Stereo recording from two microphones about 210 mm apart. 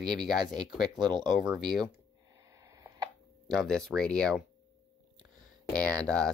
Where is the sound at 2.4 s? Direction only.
15° right (ahead or behind).